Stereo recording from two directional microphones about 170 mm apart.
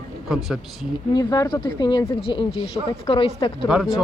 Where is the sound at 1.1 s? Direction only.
25° left (ahead or behind).